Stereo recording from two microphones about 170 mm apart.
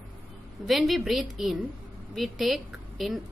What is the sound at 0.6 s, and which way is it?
A woman's voice, centre (ahead or behind).